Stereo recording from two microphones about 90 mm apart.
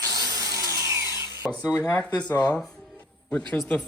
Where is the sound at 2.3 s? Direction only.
20° left (ahead or behind).